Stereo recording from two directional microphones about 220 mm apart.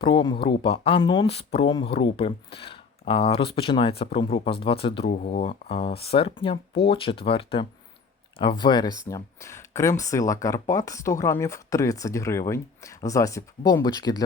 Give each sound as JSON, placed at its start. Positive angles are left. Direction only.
{"t": 0.0, "sound": "speech", "side_deg": 20}
{"t": 5.1, "sound": "speech", "side_deg": 35}